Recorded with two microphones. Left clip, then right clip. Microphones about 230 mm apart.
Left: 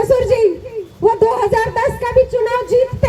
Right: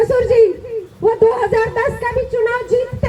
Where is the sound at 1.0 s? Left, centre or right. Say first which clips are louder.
Left 2 dB; left.